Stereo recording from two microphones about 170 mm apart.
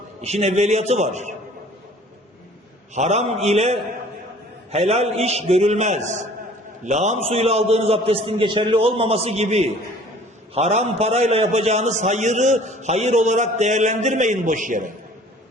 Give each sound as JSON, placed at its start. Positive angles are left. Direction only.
{"t": 0.2, "sound": "a man's voice", "side_deg": -40}
{"t": 2.9, "sound": "a man's voice", "side_deg": -40}